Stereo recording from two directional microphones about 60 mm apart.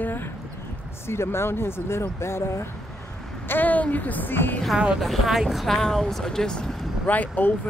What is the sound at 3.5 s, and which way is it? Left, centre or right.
Speech, left.